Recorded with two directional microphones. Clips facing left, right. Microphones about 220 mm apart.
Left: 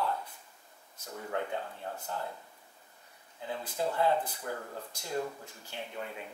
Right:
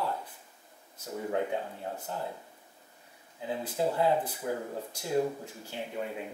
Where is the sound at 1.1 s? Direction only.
15° right (ahead or behind).